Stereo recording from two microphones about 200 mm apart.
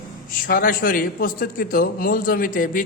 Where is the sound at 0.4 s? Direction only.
45° left (ahead or behind).